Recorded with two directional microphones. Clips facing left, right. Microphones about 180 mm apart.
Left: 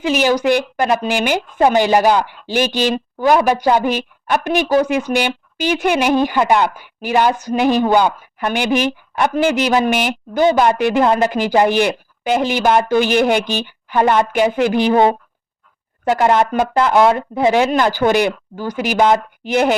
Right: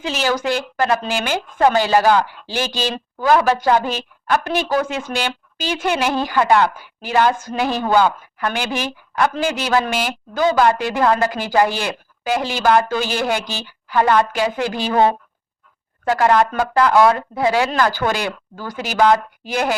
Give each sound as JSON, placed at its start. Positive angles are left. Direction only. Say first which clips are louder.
{"t": 0.0, "sound": "speech", "louder": "left 5 dB", "side_deg": 15}